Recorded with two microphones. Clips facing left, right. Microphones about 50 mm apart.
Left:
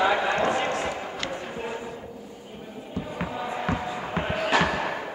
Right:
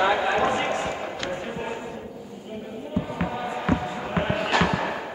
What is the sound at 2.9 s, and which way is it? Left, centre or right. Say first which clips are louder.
Music: right 3 dB; centre.